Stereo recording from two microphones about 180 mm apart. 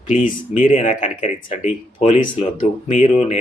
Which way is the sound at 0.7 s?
45° left (ahead or behind).